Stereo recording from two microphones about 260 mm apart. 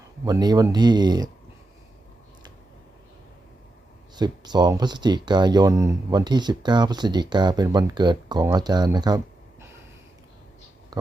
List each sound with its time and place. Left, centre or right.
0.3 s speech: centre
4.1 s speech: centre